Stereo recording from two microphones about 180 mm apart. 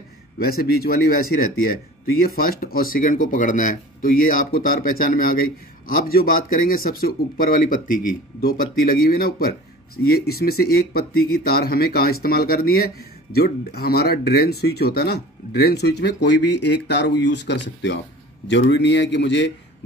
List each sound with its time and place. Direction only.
0.4 s speech: 55° left (ahead or behind); by 19.5 s 80° left